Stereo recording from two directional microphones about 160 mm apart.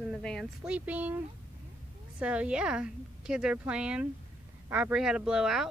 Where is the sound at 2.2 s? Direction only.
5° right (ahead or behind).